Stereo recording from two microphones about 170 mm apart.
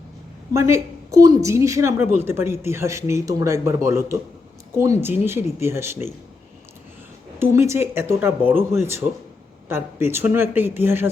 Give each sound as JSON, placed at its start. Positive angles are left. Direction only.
{"t": 0.5, "sound": "a woman's voice", "side_deg": -15}
{"t": 7.3, "sound": "a woman's voice", "side_deg": -15}